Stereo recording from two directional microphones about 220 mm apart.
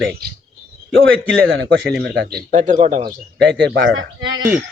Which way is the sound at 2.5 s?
35° right (ahead or behind).